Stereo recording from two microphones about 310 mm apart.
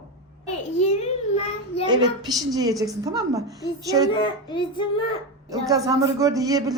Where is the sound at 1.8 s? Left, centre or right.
Centre.